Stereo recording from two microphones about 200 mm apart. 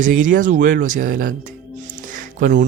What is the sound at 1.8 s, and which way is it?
Music, 40° right (ahead or behind).